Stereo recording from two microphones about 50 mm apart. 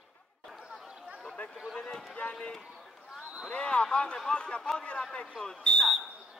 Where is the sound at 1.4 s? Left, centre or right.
Left.